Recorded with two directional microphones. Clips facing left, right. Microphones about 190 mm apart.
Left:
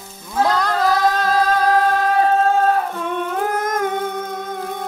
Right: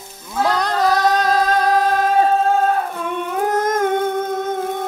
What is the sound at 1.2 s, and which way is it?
Music, 20° right (ahead or behind).